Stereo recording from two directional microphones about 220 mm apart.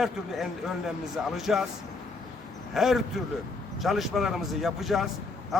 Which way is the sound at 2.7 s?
Centre (ahead or behind).